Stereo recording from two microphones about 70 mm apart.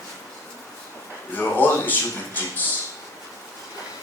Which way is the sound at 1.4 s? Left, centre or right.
Left.